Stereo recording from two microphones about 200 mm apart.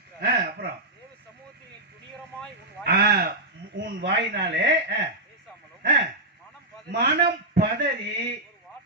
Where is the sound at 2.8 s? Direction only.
50° right (ahead or behind).